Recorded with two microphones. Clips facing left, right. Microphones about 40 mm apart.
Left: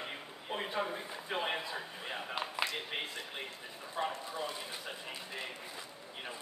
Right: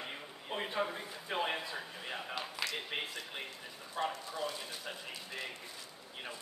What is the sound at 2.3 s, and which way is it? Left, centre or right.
Speech, left.